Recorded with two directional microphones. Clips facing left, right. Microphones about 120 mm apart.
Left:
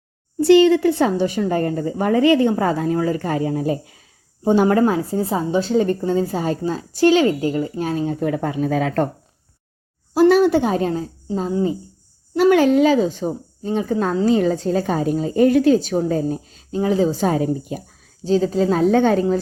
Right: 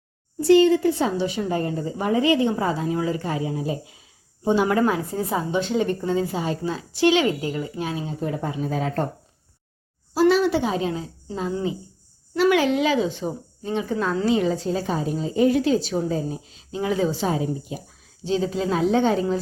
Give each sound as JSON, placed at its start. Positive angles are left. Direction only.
{"t": 0.4, "sound": "a woman's voice", "side_deg": 80}
{"t": 4.4, "sound": "a woman's voice", "side_deg": 40}
{"t": 4.8, "sound": "a woman's voice", "side_deg": 30}
{"t": 8.2, "sound": "speech", "side_deg": 70}
{"t": 10.2, "sound": "a woman's voice", "side_deg": 50}
{"t": 12.4, "sound": "a woman's voice", "side_deg": 45}